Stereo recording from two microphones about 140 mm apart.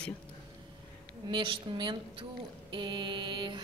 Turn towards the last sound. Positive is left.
turn(degrees=-35)  # may be behind; listen again after turning